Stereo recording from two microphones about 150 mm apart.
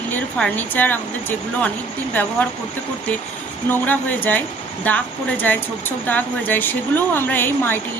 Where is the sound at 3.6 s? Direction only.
10° left (ahead or behind).